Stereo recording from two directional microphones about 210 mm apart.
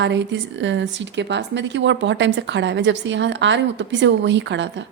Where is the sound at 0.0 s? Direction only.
60° right (ahead or behind).